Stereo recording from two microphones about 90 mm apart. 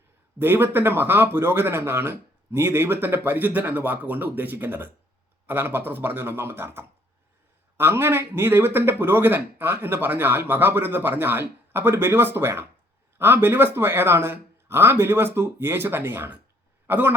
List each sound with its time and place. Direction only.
0.3 s a man's voice: 25° right (ahead or behind)